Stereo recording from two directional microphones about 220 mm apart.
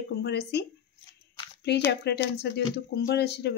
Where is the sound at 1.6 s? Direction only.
50° left (ahead or behind).